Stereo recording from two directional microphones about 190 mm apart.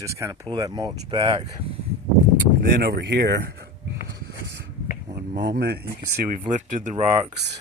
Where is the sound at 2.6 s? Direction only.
60° right (ahead or behind).